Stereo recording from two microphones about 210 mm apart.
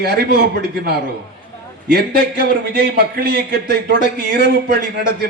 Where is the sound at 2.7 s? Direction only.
50° right (ahead or behind).